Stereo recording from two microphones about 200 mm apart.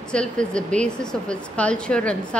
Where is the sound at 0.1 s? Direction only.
5° left (ahead or behind).